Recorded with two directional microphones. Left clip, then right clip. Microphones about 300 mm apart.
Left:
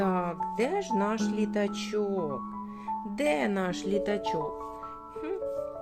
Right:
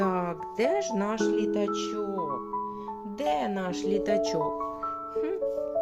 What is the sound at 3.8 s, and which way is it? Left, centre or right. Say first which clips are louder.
Speech: right 7 dB; centre.